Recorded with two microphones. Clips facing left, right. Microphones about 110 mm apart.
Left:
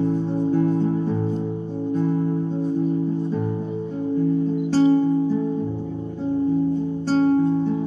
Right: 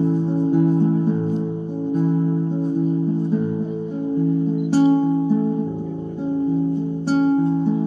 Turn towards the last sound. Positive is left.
turn(degrees=-15)  # may be behind; listen again after turning